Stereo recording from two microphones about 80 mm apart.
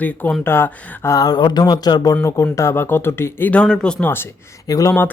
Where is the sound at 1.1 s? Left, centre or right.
Left.